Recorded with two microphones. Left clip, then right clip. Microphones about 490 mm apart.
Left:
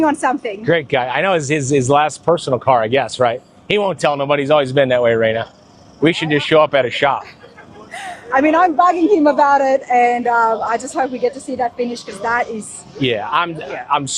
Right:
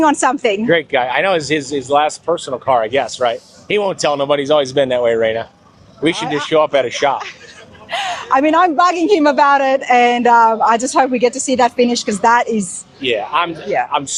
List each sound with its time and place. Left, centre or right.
0.0 s a woman's voice: right
0.7 s speech: left
4.0 s speech: centre
7.9 s a woman's voice: right
13.0 s speech: left